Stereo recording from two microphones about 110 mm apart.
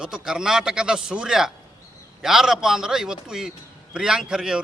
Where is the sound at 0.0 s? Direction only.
5° right (ahead or behind).